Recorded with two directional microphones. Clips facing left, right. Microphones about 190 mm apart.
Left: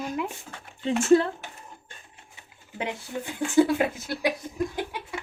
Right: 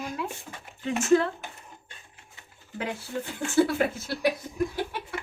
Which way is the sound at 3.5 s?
15° left (ahead or behind).